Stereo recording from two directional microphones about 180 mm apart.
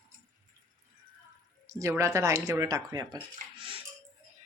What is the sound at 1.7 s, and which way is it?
Speech, 15° right (ahead or behind).